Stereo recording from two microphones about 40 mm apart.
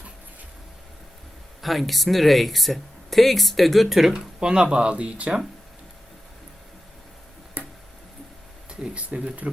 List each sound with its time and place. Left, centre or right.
1.6 s speech: centre
4.4 s speech: right
7.6 s tick-tock: right
8.8 s speech: right